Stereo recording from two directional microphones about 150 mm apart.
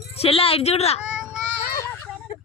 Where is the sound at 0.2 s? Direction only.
40° left (ahead or behind).